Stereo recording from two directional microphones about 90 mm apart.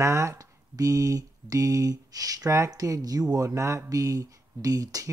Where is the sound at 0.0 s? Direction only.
35° right (ahead or behind).